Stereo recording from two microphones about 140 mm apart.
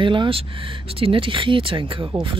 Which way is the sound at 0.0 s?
35° right (ahead or behind).